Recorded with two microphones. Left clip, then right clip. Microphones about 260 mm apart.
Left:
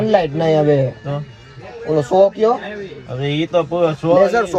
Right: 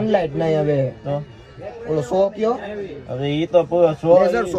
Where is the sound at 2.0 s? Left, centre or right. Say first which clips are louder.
Left 6 dB; left.